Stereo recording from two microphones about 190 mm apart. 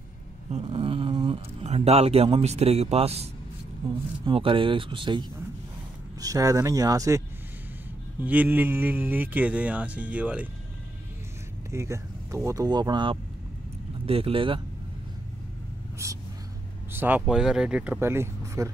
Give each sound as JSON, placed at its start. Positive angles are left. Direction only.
{"t": 0.5, "sound": "speech", "side_deg": -30}
{"t": 4.3, "sound": "speech", "side_deg": -30}
{"t": 6.2, "sound": "speech", "side_deg": -15}
{"t": 11.7, "sound": "speech", "side_deg": -15}
{"t": 16.0, "sound": "speech", "side_deg": -15}